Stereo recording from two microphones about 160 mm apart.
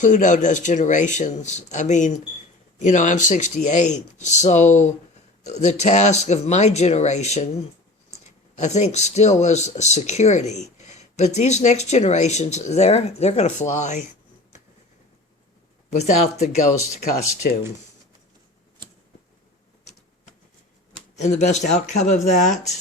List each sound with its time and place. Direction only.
0.0 s speech: 50° left (ahead or behind)
8.5 s speech: 45° left (ahead or behind)
15.9 s speech: 45° left (ahead or behind)
21.2 s speech: 45° left (ahead or behind)